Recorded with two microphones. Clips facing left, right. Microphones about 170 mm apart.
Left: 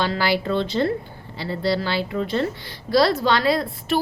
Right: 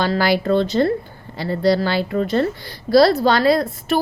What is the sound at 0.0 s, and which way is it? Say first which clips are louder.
A woman's voice: right 4 dB; 45° right (ahead or behind).